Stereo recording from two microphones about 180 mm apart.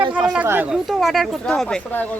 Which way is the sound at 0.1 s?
5° right (ahead or behind).